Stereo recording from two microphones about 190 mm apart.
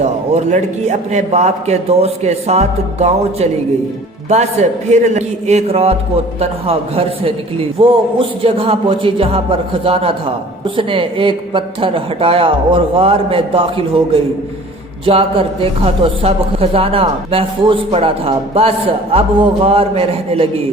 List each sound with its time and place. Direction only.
0.0 s a man's voice: 35° right (ahead or behind)